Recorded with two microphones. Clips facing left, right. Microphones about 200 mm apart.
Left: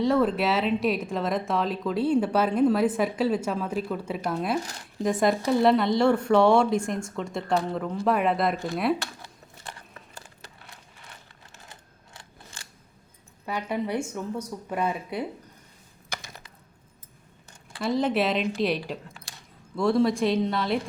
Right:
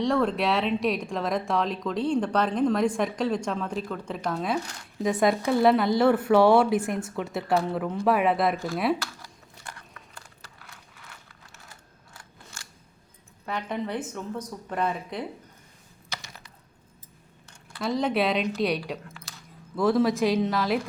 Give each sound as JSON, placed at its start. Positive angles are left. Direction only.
{"t": 0.0, "sound": "speech", "side_deg": 0}
{"t": 9.2, "sound": "a sound", "side_deg": 25}
{"t": 13.4, "sound": "a woman's voice", "side_deg": 10}
{"t": 17.7, "sound": "speech", "side_deg": 0}